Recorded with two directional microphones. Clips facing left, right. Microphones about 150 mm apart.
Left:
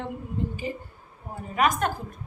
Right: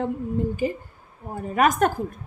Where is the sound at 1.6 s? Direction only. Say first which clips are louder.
Right 4 dB; 45° right (ahead or behind).